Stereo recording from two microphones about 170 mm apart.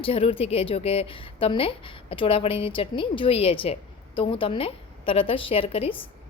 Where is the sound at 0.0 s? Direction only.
35° left (ahead or behind).